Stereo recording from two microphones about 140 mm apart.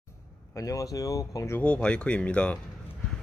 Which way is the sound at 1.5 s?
10° left (ahead or behind).